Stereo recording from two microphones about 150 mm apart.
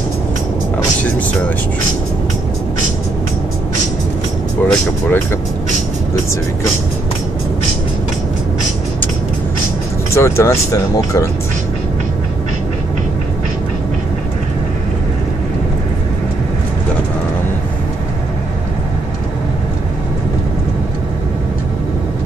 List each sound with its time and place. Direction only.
4.6 s speech: 15° left (ahead or behind)
10.1 s speech: 20° left (ahead or behind)